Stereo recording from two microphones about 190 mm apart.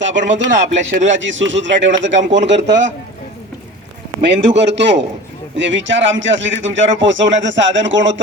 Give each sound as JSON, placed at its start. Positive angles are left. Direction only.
{"t": 0.0, "sound": "a man's voice", "side_deg": -75}
{"t": 0.5, "sound": "speech", "side_deg": -40}
{"t": 1.1, "sound": "a man's voice", "side_deg": -75}
{"t": 4.2, "sound": "a man's voice", "side_deg": -65}